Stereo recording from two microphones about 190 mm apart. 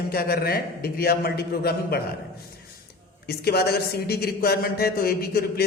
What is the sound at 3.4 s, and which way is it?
Speech, 55° left (ahead or behind).